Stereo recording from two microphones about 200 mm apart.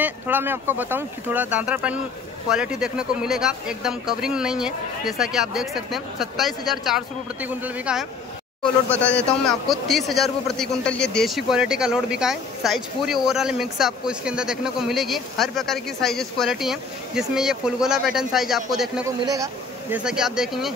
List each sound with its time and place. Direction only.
0.0 s a man's voice: 10° right (ahead or behind)
8.9 s a man's voice: 5° left (ahead or behind)
19.3 s speech: 15° right (ahead or behind)
20.0 s a man's voice: 5° right (ahead or behind)